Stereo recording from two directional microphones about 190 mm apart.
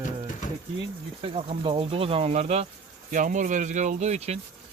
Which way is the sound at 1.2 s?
30° right (ahead or behind).